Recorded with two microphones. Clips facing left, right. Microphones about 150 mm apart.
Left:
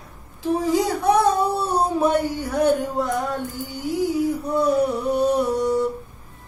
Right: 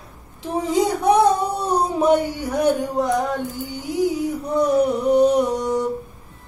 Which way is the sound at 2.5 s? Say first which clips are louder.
Right 1 dB; 15° right (ahead or behind).